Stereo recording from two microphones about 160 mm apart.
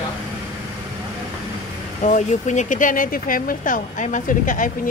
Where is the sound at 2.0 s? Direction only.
50° left (ahead or behind).